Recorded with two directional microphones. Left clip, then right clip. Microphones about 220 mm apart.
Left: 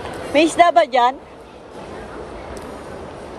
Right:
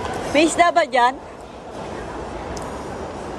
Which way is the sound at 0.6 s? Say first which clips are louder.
Left 4 dB; 5° right (ahead or behind).